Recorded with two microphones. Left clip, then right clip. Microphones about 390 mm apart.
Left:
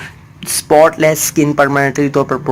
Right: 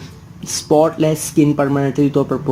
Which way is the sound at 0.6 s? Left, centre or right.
Left.